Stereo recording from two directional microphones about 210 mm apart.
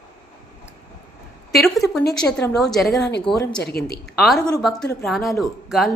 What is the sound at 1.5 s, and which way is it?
A woman's voice, centre (ahead or behind).